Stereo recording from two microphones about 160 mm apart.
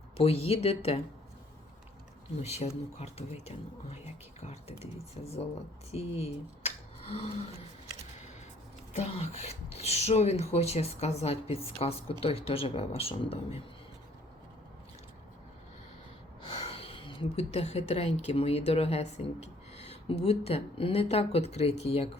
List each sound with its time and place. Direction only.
0.2 s speech: 35° left (ahead or behind)
2.4 s speech: 40° left (ahead or behind)
5.9 s speech: 40° left (ahead or behind)
8.9 s speech: 40° left (ahead or behind)
16.4 s speech: 35° left (ahead or behind)